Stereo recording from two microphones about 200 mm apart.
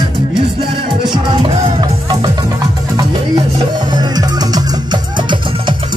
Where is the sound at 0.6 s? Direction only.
25° right (ahead or behind).